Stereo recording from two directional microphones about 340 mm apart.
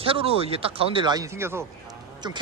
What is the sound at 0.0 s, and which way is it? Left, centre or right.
A man's voice, centre.